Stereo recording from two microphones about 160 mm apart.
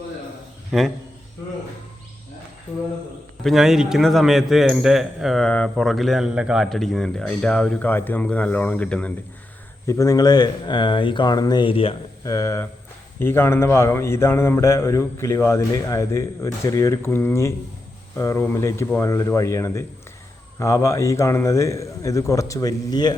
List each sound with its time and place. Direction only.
0.7 s a man's voice: centre (ahead or behind)
3.4 s a man's voice: centre (ahead or behind)
9.8 s a man's voice: 20° left (ahead or behind); by 11.9 s 35° left (ahead or behind)
12.2 s a man's voice: 20° left (ahead or behind)